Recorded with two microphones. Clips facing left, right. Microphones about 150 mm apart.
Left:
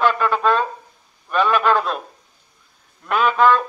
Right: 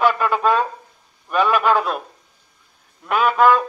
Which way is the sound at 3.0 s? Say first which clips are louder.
Right 1 dB; 10° right (ahead or behind).